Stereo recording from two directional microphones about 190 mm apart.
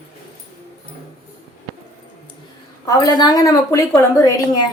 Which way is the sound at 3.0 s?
20° left (ahead or behind).